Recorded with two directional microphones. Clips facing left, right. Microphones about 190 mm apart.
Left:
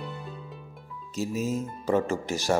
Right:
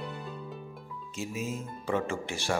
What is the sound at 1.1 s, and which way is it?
A man's voice, 40° left (ahead or behind).